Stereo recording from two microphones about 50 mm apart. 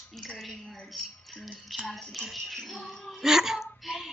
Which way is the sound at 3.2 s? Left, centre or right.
Centre.